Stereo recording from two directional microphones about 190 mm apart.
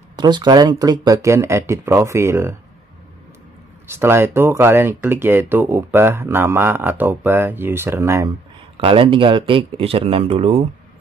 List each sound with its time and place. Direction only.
0.1 s speech: 25° right (ahead or behind)
3.8 s speech: 10° right (ahead or behind)
8.7 s speech: 30° right (ahead or behind)